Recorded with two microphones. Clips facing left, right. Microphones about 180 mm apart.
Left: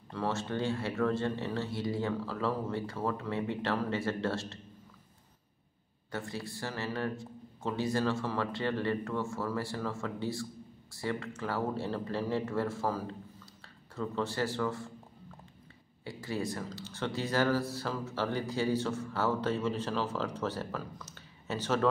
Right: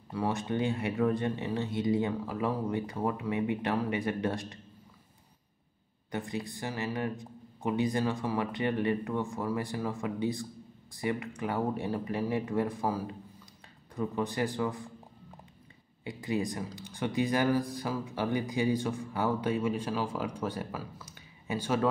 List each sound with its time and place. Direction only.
0.1 s speech: 15° right (ahead or behind)
6.1 s speech: 15° right (ahead or behind)
16.0 s speech: 15° right (ahead or behind)